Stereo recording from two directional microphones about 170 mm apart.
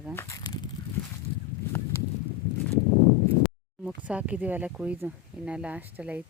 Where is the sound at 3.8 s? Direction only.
10° right (ahead or behind).